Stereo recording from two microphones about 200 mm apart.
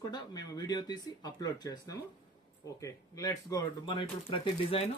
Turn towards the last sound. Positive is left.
turn(degrees=25)  # may be behind; listen again after turning